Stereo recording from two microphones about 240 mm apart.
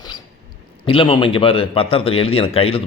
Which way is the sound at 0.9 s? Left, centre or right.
Left.